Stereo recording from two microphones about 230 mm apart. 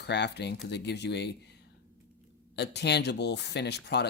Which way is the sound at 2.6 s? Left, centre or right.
Left.